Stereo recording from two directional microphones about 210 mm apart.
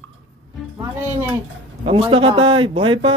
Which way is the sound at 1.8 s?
25° right (ahead or behind).